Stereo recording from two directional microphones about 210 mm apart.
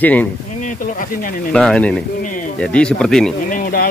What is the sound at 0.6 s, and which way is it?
Speech, 40° left (ahead or behind).